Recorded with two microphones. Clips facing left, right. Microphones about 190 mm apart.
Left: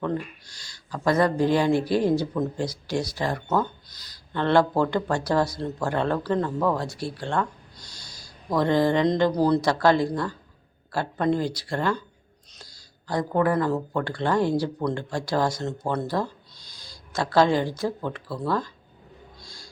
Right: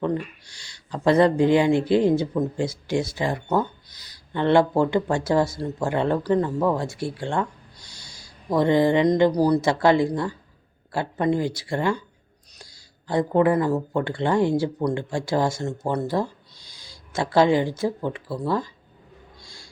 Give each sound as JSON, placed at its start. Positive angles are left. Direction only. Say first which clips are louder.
{"t": 0.9, "sound": "speech", "louder": "right 4 dB", "side_deg": -25}
{"t": 7.9, "sound": "a sound", "louder": "even", "side_deg": -55}
{"t": 8.4, "sound": "speech", "louder": "right 3 dB", "side_deg": -15}
{"t": 13.1, "sound": "speech", "louder": "right 4 dB", "side_deg": -20}
{"t": 16.6, "sound": "a sound", "louder": "even", "side_deg": -55}
{"t": 17.2, "sound": "speech", "louder": "right 2 dB", "side_deg": -15}